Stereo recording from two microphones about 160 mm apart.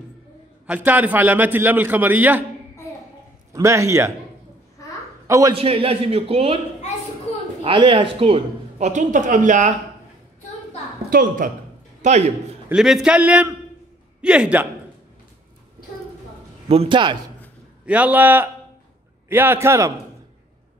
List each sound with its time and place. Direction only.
0.7 s a man's voice: 10° right (ahead or behind)
3.5 s a man's voice: 20° right (ahead or behind)
5.2 s a sound: 20° right (ahead or behind)
5.5 s a man's voice: 35° right (ahead or behind)
7.6 s speech: 30° right (ahead or behind); by 9.8 s 50° right (ahead or behind)
11.1 s a woman's voice: 60° right (ahead or behind)
12.0 s a man's voice: 45° right (ahead or behind)
12.6 s a man's voice: 5° right (ahead or behind)
16.6 s a man's voice: 40° right (ahead or behind)
17.8 s a man's voice: 10° right (ahead or behind)